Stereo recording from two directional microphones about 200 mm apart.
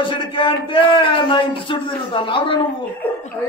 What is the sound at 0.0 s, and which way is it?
A man's voice, 25° left (ahead or behind).